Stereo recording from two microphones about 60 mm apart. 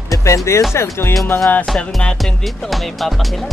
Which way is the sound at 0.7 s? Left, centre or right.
Left.